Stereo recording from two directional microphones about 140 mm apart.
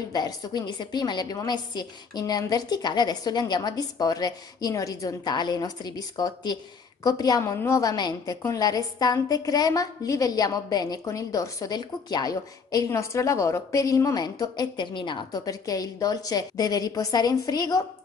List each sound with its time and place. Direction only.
0.1 s a woman's voice: 30° left (ahead or behind)